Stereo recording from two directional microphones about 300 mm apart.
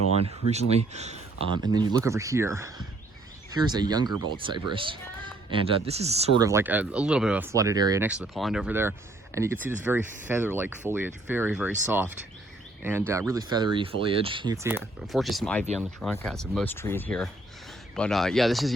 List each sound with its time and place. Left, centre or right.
0.2 s speech: right
6.4 s speech: centre